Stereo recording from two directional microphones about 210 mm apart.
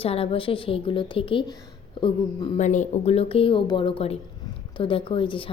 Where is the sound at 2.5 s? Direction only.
35° left (ahead or behind).